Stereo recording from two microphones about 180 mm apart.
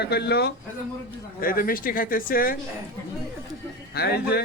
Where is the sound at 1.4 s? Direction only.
55° left (ahead or behind).